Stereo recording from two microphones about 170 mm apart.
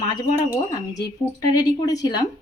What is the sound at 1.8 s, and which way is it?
Speech, 25° left (ahead or behind).